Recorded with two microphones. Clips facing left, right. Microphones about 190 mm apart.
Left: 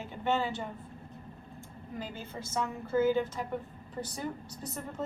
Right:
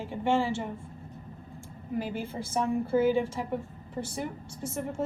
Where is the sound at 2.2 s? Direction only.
30° right (ahead or behind).